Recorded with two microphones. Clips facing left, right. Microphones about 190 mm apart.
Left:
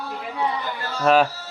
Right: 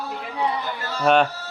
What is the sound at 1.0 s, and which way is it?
Speech, 5° left (ahead or behind).